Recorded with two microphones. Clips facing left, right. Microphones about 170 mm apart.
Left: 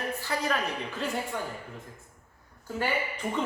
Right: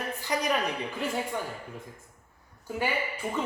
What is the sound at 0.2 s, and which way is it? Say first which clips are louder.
A woman's voice: right 4 dB; 15° right (ahead or behind).